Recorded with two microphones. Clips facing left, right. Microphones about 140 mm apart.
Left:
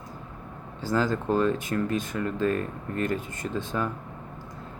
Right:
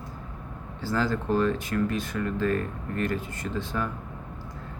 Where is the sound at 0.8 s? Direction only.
15° left (ahead or behind).